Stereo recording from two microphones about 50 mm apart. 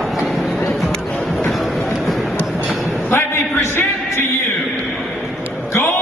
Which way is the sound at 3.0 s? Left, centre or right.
Left.